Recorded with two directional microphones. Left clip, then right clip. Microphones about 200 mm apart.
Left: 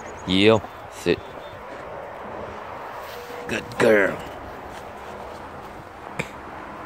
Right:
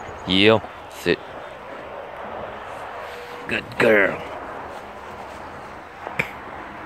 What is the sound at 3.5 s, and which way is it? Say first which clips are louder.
Speech: right 1 dB; 15° left (ahead or behind).